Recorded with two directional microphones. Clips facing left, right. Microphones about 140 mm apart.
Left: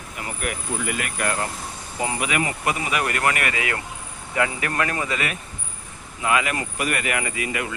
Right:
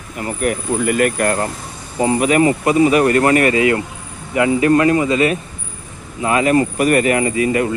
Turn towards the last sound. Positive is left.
turn(degrees=-35)  # may be behind; listen again after turning